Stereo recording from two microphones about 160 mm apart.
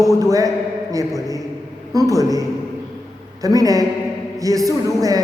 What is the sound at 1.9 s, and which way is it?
A woman's voice, 20° right (ahead or behind).